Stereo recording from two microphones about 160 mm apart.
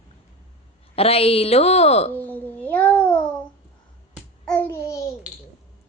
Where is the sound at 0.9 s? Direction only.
40° left (ahead or behind).